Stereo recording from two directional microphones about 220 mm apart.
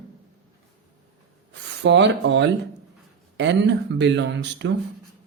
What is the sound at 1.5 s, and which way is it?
Speech, 55° right (ahead or behind).